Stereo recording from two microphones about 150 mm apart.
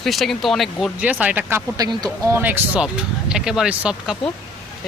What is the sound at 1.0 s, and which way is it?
Speech, 10° right (ahead or behind).